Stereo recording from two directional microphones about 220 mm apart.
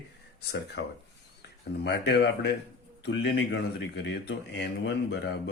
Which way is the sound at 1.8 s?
50° left (ahead or behind).